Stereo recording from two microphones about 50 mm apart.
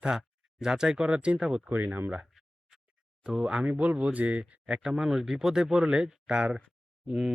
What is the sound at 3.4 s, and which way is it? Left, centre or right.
Speech, right.